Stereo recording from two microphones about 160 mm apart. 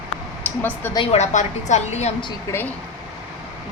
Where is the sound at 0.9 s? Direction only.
40° left (ahead or behind).